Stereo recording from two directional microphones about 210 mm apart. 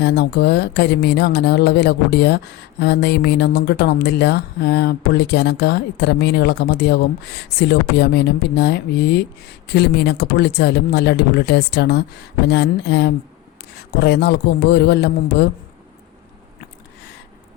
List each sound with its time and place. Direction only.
0.0 s speech: 50° left (ahead or behind)